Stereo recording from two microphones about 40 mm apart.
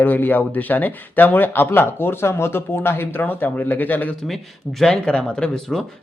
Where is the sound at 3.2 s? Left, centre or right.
Left.